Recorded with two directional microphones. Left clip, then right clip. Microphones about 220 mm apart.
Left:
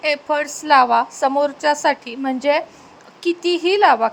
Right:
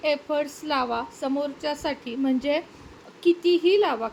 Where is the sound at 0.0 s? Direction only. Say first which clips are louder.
Left 5 dB; 15° left (ahead or behind).